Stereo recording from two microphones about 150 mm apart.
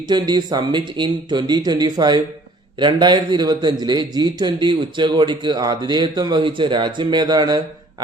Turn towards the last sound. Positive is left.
turn(degrees=-30)  # may be behind; listen again after turning